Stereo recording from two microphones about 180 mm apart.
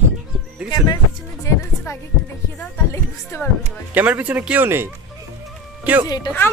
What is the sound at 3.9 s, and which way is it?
Speech, 10° right (ahead or behind).